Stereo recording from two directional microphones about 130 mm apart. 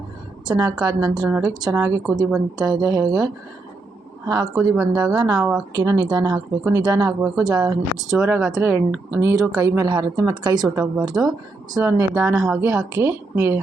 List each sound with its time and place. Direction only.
0.4 s a woman's voice: 30° right (ahead or behind)
4.3 s a woman's voice: 30° right (ahead or behind)
8.4 s a woman's voice: 5° right (ahead or behind)
9.3 s a woman's voice: 25° right (ahead or behind)
12.3 s a woman's voice: 5° right (ahead or behind)
12.5 s a woman's voice: 20° right (ahead or behind)